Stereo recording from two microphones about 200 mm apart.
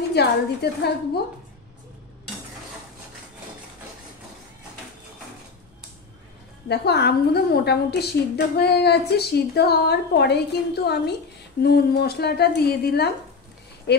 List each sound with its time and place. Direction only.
0.1 s a woman's voice: 55° left (ahead or behind)
6.7 s a woman's voice: 55° left (ahead or behind)